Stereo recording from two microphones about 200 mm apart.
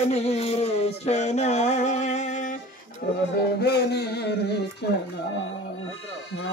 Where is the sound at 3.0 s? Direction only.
60° left (ahead or behind).